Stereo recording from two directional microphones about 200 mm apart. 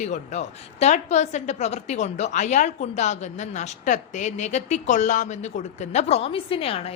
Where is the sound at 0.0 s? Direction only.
35° left (ahead or behind).